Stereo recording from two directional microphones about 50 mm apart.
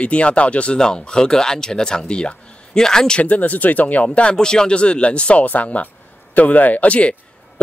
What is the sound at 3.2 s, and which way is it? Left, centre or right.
Speech, left.